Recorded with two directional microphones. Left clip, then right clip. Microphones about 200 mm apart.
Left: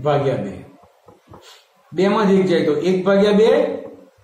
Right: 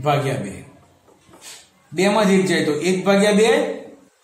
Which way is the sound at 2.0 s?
25° right (ahead or behind).